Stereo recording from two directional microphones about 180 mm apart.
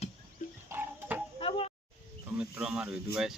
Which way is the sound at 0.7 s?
10° right (ahead or behind).